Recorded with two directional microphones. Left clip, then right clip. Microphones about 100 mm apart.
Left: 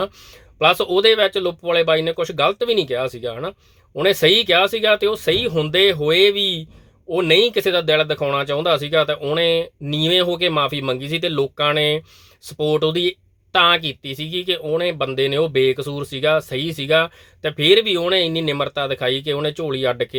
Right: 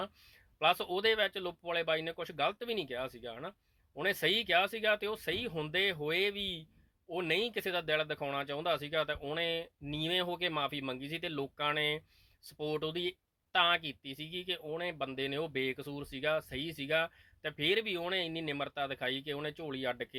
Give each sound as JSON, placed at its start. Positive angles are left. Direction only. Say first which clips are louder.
{"t": 0.6, "sound": "speech", "louder": "left 15 dB", "side_deg": 35}